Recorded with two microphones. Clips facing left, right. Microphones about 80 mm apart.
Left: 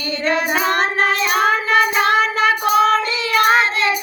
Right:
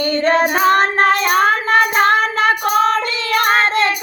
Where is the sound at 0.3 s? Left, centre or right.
Right.